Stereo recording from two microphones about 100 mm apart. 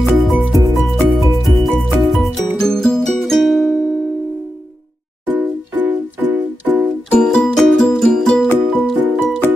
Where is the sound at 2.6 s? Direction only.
5° left (ahead or behind).